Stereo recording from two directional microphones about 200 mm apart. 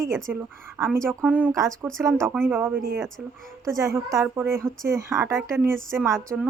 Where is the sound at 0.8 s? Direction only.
15° right (ahead or behind).